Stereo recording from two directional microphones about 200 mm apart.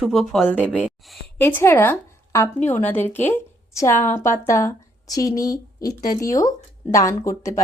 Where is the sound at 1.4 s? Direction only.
10° left (ahead or behind).